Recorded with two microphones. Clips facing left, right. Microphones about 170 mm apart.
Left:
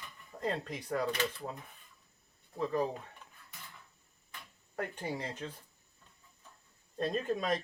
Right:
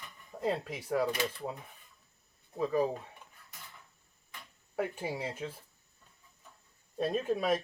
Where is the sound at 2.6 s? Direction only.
10° right (ahead or behind).